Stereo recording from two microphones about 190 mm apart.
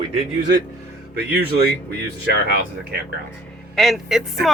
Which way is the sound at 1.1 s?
55° right (ahead or behind).